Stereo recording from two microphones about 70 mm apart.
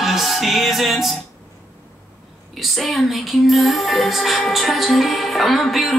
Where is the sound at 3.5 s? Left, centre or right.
Centre.